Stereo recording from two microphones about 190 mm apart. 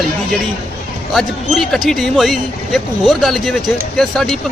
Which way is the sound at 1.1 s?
Centre (ahead or behind).